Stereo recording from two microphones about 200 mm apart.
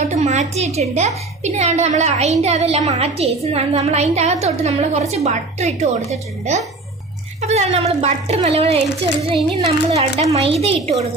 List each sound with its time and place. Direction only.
0.1 s a woman's voice: 35° right (ahead or behind)